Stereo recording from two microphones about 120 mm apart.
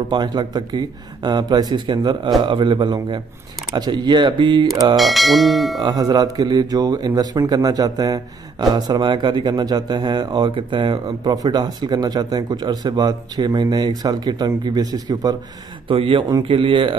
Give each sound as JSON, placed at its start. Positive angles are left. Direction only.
{"t": 0.1, "sound": "speech", "side_deg": -35}
{"t": 4.9, "sound": "bell", "side_deg": 0}
{"t": 5.8, "sound": "speech", "side_deg": -35}
{"t": 15.9, "sound": "speech", "side_deg": -45}